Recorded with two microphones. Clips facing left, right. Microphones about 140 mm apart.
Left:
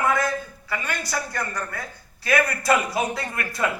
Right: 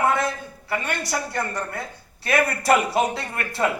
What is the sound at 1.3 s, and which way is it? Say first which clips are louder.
A man's voice: right 2 dB; 25° right (ahead or behind).